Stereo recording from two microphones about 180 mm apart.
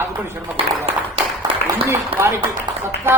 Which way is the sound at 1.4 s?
30° right (ahead or behind).